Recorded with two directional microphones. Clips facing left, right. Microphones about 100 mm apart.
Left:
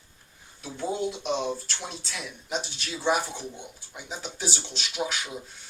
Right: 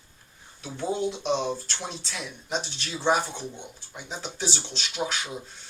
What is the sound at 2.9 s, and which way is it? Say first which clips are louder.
Speech: right 2 dB; 25° right (ahead or behind).